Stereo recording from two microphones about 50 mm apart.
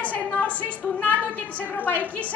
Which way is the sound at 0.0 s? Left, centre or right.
Left.